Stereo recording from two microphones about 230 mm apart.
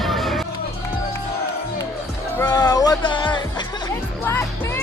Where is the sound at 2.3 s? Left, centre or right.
Centre.